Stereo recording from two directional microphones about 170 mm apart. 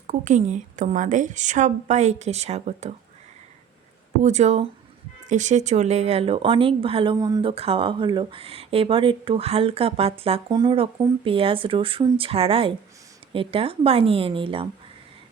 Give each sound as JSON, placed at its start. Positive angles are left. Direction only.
{"t": 0.1, "sound": "a woman's voice", "side_deg": -45}
{"t": 4.2, "sound": "speech", "side_deg": -40}
{"t": 7.5, "sound": "speech", "side_deg": -35}